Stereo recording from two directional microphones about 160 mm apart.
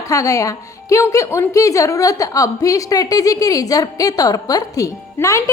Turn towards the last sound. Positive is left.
turn(degrees=20)  # may be behind; listen again after turning